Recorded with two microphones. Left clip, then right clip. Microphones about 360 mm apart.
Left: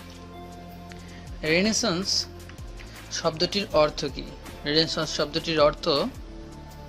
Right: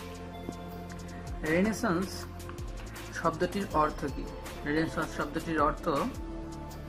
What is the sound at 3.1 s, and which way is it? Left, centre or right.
Speech, left.